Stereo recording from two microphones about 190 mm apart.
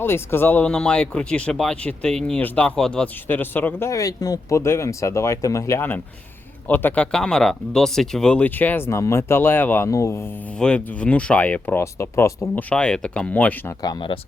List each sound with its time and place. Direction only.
0.0 s speech: 10° left (ahead or behind)
13.8 s speech: 25° left (ahead or behind)